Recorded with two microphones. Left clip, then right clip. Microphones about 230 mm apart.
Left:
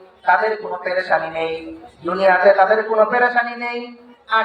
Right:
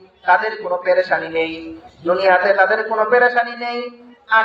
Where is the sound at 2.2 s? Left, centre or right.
Right.